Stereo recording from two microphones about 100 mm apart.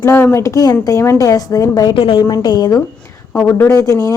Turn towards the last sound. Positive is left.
turn(degrees=35)  # may be behind; listen again after turning